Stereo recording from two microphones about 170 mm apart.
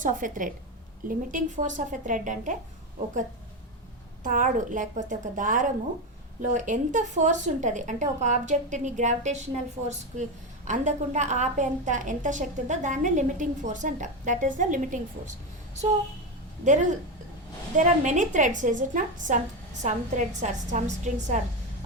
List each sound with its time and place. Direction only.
0.0 s a woman's voice: 50° right (ahead or behind)
4.2 s a woman's voice: 50° right (ahead or behind)
10.7 s a woman's voice: 45° right (ahead or behind)
17.7 s a woman's voice: 45° right (ahead or behind)